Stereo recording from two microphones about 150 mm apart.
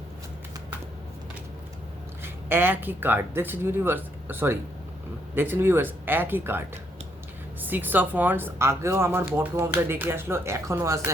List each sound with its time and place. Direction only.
2.2 s speech: 15° right (ahead or behind)
7.6 s speech: 10° right (ahead or behind)